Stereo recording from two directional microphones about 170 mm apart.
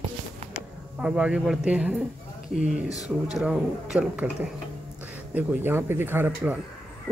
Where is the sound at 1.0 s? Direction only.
5° right (ahead or behind).